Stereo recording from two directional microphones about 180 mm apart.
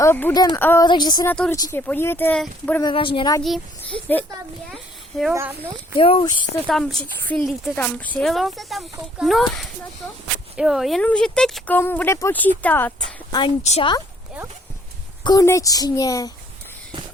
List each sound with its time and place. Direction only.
0.0 s speech: 10° left (ahead or behind)
0.3 s speech: 20° left (ahead or behind)
0.9 s speech: 25° left (ahead or behind)
1.3 s speech: 10° left (ahead or behind)
2.8 s speech: 30° left (ahead or behind)
3.4 s speech: centre (ahead or behind)
4.7 s a sound: centre (ahead or behind)
5.3 s speech: 15° right (ahead or behind)
6.0 s speech: 30° left (ahead or behind)
6.7 s speech: 5° left (ahead or behind)
13.6 s speech: 35° left (ahead or behind)
15.2 s speech: 20° left (ahead or behind)